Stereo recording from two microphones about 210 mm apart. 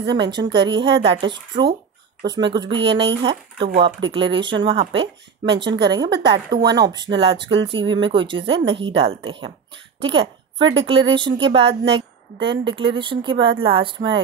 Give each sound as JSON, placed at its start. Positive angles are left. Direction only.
{"t": 0.1, "sound": "speech", "side_deg": -20}
{"t": 9.9, "sound": "throat clearing", "side_deg": -25}
{"t": 10.9, "sound": "speech", "side_deg": -25}